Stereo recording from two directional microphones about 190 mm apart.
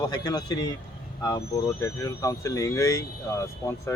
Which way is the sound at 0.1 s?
20° left (ahead or behind).